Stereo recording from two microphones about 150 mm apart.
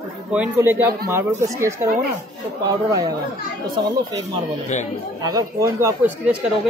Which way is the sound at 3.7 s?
25° right (ahead or behind).